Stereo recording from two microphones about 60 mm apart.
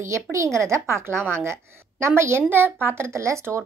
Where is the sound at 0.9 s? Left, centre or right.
Right.